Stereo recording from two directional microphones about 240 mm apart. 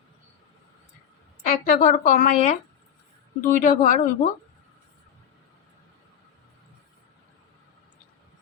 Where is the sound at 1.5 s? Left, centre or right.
Left.